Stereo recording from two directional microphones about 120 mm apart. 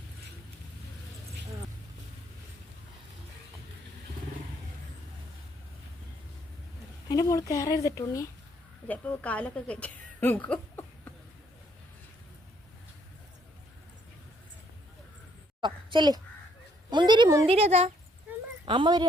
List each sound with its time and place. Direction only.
7.1 s speech: 30° left (ahead or behind)
8.9 s a woman's voice: 10° left (ahead or behind)
15.6 s a sound: 40° right (ahead or behind)
16.9 s speech: 40° right (ahead or behind)
17.4 s speech: 55° right (ahead or behind)
18.6 s speech: 45° right (ahead or behind)